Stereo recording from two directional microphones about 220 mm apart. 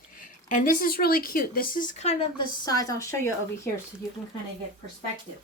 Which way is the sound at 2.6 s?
15° left (ahead or behind).